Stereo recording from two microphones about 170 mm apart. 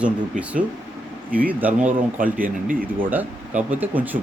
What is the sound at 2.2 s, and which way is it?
Speech, 55° right (ahead or behind).